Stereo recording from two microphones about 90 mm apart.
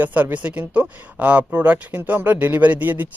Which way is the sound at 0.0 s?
20° right (ahead or behind).